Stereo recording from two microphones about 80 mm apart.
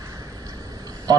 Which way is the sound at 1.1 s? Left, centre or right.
Right.